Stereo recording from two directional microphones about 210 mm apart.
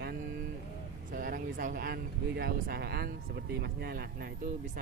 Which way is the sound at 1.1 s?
45° right (ahead or behind).